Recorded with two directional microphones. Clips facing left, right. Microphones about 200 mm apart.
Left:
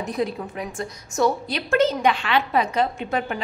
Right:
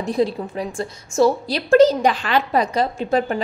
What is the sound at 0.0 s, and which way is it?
A woman's voice, 30° right (ahead or behind).